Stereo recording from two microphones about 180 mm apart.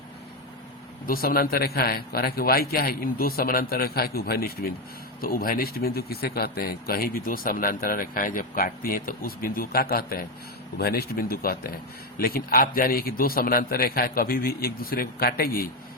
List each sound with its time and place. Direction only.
1.0 s speech: 55° left (ahead or behind)